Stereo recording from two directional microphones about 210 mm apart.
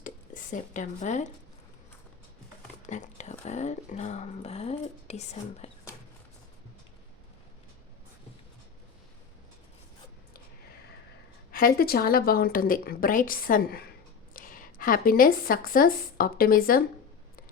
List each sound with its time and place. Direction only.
0.5 s speech: 35° left (ahead or behind)
2.8 s speech: 35° left (ahead or behind)
11.5 s a woman's voice: 45° left (ahead or behind)